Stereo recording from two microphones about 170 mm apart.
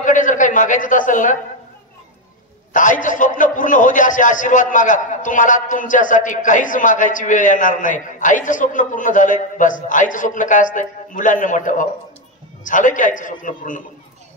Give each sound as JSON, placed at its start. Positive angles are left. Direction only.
{"t": 0.0, "sound": "a man's voice", "side_deg": 50}
{"t": 2.7, "sound": "a man's voice", "side_deg": 50}